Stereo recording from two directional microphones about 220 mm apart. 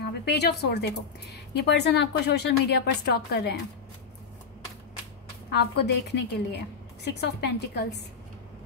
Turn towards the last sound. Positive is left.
turn(degrees=50)  # may be behind; listen again after turning